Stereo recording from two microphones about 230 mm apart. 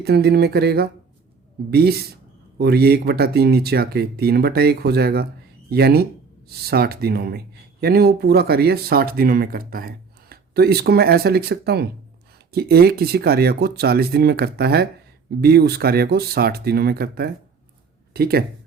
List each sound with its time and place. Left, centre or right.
0.0 s speech: right